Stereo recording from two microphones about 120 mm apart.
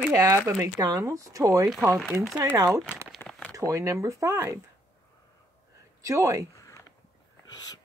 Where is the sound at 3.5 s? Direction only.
25° right (ahead or behind).